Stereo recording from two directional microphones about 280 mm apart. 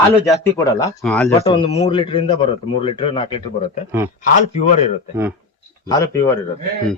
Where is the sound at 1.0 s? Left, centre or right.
Centre.